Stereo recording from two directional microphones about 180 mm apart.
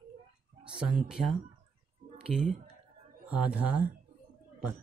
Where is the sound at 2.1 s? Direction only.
40° right (ahead or behind).